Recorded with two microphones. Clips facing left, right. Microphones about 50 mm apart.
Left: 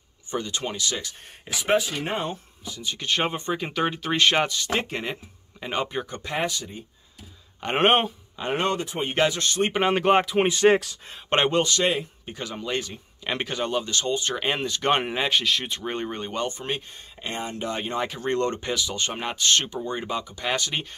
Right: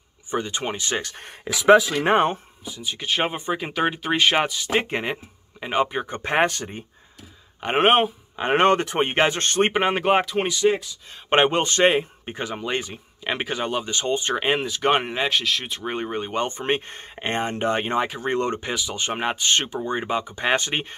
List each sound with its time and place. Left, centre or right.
0.3 s speech: right
1.1 s speech: right
2.6 s speech: centre
4.8 s speech: right
6.2 s speech: right
7.6 s speech: centre
8.4 s speech: right
9.1 s speech: right
9.8 s speech: centre
10.6 s speech: left
11.2 s speech: right
14.4 s speech: centre
16.3 s speech: right
17.9 s speech: centre; by 20.9 s right